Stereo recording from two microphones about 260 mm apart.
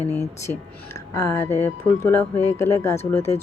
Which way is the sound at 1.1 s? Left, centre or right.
Centre.